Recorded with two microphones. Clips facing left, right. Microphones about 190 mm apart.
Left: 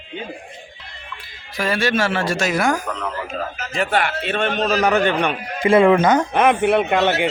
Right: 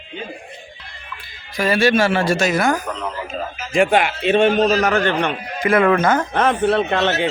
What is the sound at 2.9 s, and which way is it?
Speech, 15° right (ahead or behind).